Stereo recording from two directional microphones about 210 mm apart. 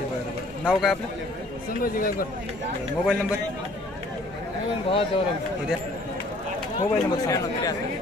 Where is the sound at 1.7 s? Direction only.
40° left (ahead or behind).